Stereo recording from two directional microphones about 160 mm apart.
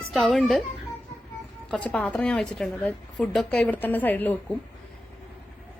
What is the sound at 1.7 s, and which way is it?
A woman's voice, 10° left (ahead or behind).